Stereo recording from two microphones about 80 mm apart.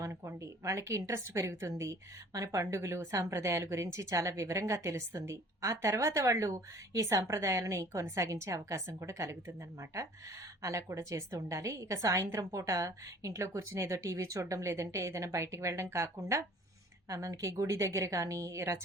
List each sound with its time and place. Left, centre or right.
0.1 s a woman's voice: right
10.6 s a woman's voice: right